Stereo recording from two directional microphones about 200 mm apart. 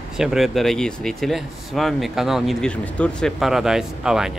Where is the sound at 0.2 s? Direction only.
Centre (ahead or behind).